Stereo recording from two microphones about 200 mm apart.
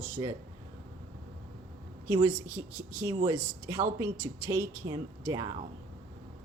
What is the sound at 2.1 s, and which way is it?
Speech, 20° right (ahead or behind).